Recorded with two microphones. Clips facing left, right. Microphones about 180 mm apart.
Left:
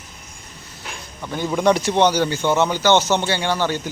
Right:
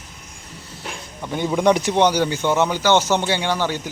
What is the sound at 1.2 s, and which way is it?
Speech, 20° right (ahead or behind).